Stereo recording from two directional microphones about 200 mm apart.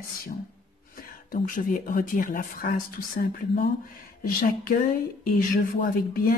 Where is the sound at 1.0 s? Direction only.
45° left (ahead or behind).